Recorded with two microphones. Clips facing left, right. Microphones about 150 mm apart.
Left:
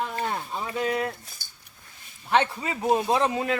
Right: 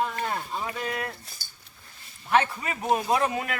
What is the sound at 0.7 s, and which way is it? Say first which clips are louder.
Speech: left 10 dB; 20° left (ahead or behind).